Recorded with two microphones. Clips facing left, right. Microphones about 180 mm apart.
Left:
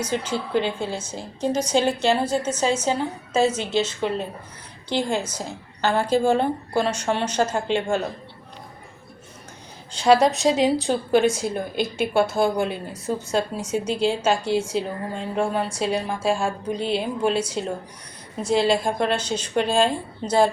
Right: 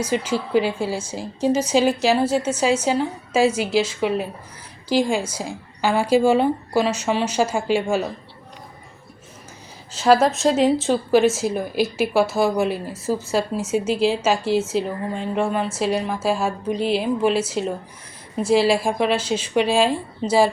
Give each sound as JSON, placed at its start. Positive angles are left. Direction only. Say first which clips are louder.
{"t": 0.0, "sound": "a woman's voice", "louder": "right 3 dB", "side_deg": -10}
{"t": 9.9, "sound": "speech", "louder": "right 1 dB", "side_deg": -5}
{"t": 18.4, "sound": "a woman's voice", "louder": "right 3 dB", "side_deg": -5}